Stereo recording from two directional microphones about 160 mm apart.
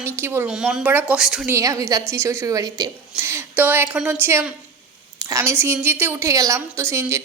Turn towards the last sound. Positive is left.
turn(degrees=-15)  # may be behind; listen again after turning